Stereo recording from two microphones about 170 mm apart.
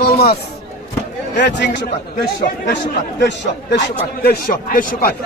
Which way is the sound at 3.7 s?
80° left.